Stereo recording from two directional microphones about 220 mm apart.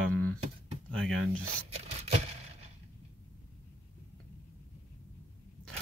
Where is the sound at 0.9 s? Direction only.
5° left (ahead or behind).